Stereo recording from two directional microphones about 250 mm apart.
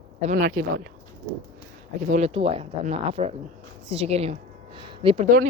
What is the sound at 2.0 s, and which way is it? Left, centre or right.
A woman's voice, right.